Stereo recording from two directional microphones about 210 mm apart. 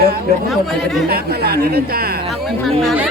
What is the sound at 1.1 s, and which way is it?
Speech, 45° right (ahead or behind).